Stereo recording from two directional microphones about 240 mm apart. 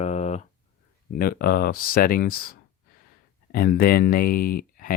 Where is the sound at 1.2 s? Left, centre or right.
Left.